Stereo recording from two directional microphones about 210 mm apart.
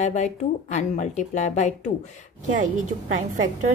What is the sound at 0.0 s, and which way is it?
Speech, 35° left (ahead or behind).